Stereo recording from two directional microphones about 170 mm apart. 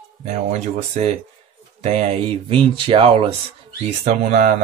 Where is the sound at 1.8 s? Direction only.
40° right (ahead or behind).